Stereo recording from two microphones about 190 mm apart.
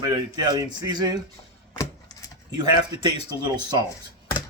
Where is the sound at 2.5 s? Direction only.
20° right (ahead or behind).